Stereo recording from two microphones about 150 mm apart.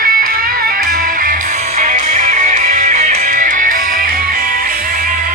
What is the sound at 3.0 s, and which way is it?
Music, 50° right (ahead or behind).